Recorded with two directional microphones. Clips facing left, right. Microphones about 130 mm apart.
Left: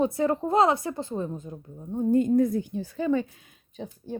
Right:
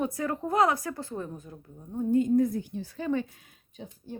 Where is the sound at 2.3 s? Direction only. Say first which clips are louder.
Left 2 dB; 90° left.